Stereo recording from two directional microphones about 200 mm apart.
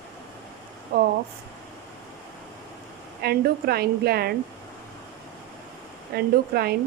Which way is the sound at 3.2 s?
50° right (ahead or behind).